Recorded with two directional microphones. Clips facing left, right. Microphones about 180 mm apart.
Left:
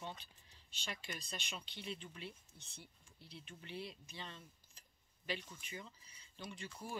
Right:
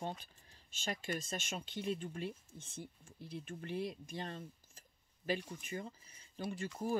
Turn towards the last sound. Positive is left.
turn(degrees=-45)  # may be behind; listen again after turning